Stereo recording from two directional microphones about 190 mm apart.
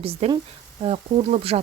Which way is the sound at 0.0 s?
30° right (ahead or behind).